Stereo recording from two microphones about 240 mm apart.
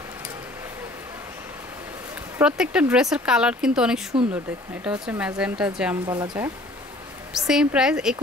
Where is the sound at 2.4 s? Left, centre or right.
Centre.